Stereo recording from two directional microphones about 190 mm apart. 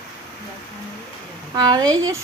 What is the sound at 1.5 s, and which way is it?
Speech, 20° right (ahead or behind).